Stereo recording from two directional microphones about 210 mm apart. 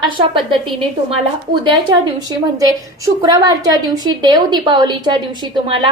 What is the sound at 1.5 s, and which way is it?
A woman's voice, 20° right (ahead or behind).